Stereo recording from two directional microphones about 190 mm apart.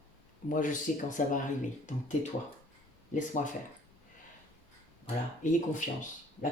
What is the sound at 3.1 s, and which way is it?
Speech, 40° left (ahead or behind).